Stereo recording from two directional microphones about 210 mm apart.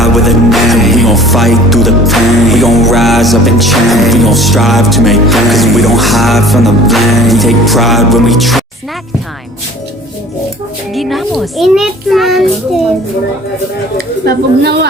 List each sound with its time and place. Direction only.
0.0 s music: centre (ahead or behind)
10.9 s music: centre (ahead or behind)
14.3 s a woman's voice: 50° right (ahead or behind)